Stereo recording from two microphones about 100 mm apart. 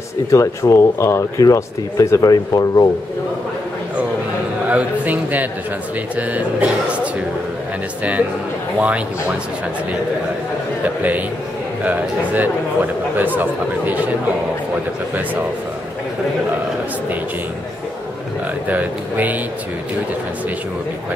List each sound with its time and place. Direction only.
0.3 s speech: 30° left (ahead or behind)
4.6 s speech: 15° right (ahead or behind)
8.7 s speech: 15° right (ahead or behind)
11.0 s a man's voice: 15° right (ahead or behind)
18.7 s speech: 15° right (ahead or behind)